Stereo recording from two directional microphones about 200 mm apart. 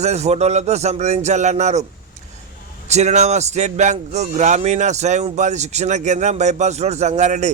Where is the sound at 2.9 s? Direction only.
35° right (ahead or behind).